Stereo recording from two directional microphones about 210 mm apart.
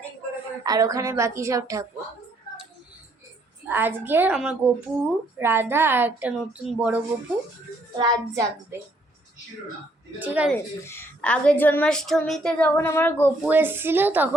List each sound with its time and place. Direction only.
0.6 s a woman's voice: 15° right (ahead or behind)
3.7 s a woman's voice: 10° right (ahead or behind)
10.2 s a woman's voice: 5° right (ahead or behind)
10.5 s a woman's voice: 10° left (ahead or behind)
13.5 s a woman's voice: 10° right (ahead or behind)